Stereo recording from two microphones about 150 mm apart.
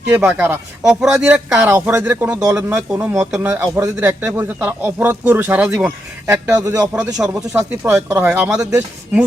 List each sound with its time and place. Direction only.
0.1 s a man's voice: 10° right (ahead or behind)
1.9 s a man's voice: 15° right (ahead or behind)
6.7 s a man's voice: 5° right (ahead or behind)
7.1 s speech: 20° right (ahead or behind)
7.9 s a man's voice: 10° right (ahead or behind)